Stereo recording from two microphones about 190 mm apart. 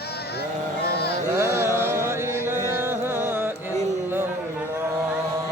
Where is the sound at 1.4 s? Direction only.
15° right (ahead or behind).